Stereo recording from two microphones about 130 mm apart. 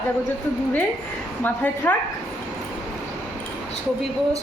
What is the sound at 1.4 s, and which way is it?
Speech, 15° left (ahead or behind).